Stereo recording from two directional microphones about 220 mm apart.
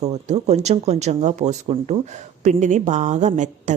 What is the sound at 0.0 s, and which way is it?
Speech, 30° right (ahead or behind).